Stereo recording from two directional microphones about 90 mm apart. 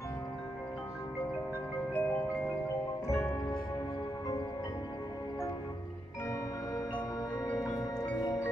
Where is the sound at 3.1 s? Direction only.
20° left (ahead or behind).